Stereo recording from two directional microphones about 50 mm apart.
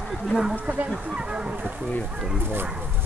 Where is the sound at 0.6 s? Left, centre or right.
Right.